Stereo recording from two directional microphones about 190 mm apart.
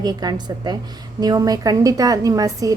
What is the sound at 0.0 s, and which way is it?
A woman's voice, 20° right (ahead or behind).